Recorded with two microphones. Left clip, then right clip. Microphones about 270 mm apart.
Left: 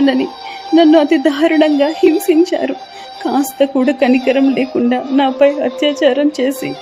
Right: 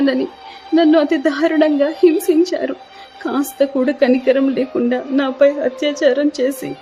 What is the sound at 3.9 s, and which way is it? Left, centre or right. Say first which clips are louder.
A man's voice: left 1 dB; centre.